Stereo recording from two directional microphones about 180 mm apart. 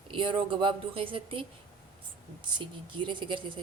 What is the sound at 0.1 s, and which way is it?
Speech, 30° right (ahead or behind).